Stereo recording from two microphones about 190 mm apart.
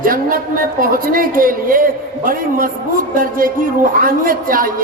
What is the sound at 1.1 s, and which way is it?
A man's voice, 50° right (ahead or behind).